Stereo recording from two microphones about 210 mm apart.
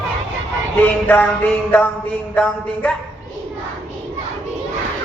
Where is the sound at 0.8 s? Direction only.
10° left (ahead or behind).